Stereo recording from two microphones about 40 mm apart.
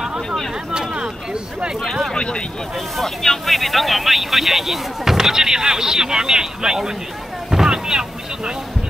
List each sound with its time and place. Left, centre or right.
0.7 s a sound: right
2.1 s speech: left
3.0 s speech: centre
7.5 s boat: centre